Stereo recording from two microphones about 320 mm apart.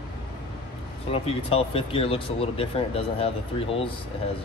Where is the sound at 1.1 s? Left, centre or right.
Centre.